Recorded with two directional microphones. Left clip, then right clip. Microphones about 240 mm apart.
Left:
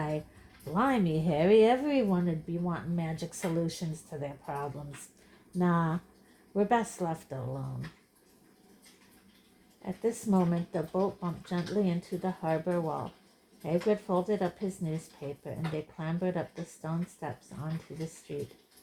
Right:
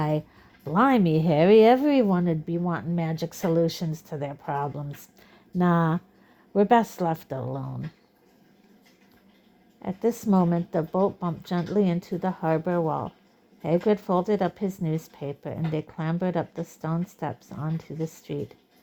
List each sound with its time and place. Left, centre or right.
0.6 s a woman's voice: right
9.8 s a woman's voice: right